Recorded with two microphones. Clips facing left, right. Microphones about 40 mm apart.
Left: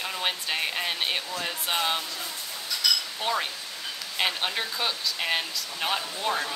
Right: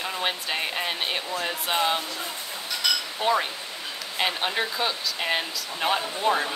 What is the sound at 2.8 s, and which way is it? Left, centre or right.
Chink, right.